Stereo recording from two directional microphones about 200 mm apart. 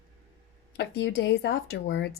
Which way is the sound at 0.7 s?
65° left (ahead or behind).